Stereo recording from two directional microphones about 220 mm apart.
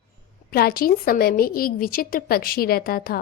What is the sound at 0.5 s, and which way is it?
A woman's voice, 45° left (ahead or behind).